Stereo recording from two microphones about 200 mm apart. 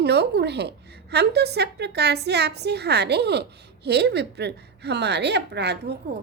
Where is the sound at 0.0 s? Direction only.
55° right (ahead or behind).